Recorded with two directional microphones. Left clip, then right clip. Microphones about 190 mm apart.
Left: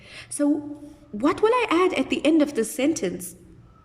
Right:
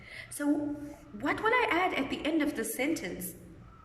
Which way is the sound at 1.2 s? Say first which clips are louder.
Left 7 dB; 60° left (ahead or behind).